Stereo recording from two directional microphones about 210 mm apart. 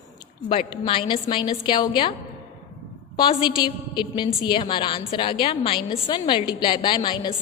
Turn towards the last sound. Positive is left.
turn(degrees=20)  # may be behind; listen again after turning